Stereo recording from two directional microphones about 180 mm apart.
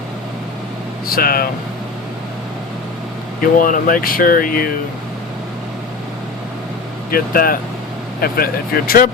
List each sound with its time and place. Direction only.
1.0 s speech: 55° left (ahead or behind)
3.6 s speech: 50° left (ahead or behind)
7.1 s speech: 55° left (ahead or behind)